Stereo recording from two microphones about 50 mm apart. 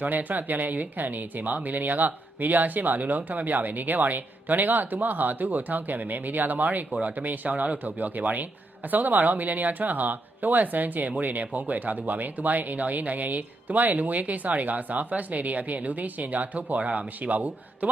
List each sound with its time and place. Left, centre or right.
0.0 s speech: right